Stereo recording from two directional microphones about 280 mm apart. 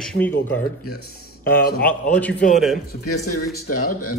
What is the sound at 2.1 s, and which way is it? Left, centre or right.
Speech, centre.